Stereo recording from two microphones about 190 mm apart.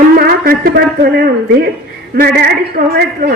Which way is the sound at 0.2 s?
50° right (ahead or behind).